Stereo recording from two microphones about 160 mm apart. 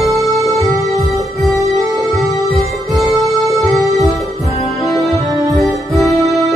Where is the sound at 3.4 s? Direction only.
Centre (ahead or behind).